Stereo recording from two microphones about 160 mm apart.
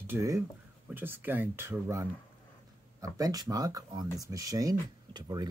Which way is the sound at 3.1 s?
20° right (ahead or behind).